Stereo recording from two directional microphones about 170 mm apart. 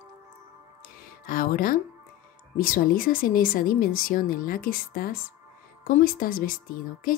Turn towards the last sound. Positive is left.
turn(degrees=55)  # may be behind; listen again after turning